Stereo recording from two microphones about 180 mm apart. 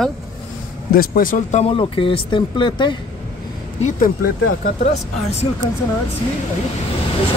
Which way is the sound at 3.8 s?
55° left (ahead or behind).